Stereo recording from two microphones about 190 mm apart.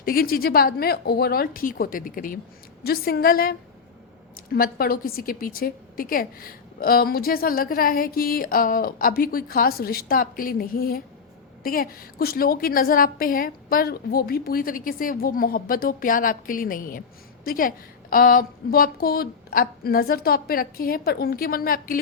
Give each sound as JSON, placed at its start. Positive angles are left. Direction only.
{"t": 0.0, "sound": "a woman's voice", "side_deg": 50}
{"t": 4.5, "sound": "a woman's voice", "side_deg": 50}